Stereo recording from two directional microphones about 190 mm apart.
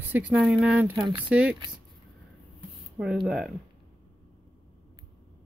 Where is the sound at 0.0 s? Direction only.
10° right (ahead or behind).